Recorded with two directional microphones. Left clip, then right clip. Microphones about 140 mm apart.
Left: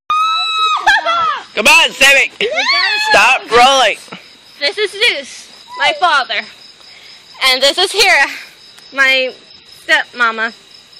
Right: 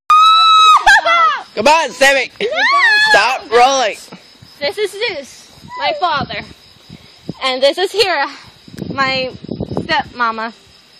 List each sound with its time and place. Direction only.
0.1 s a sound: 25° right (ahead or behind)
3.5 s speech: 10° right (ahead or behind)
4.6 s speech: 25° right (ahead or behind)
7.3 s speech: 30° right (ahead or behind); by 10.5 s 65° right (ahead or behind)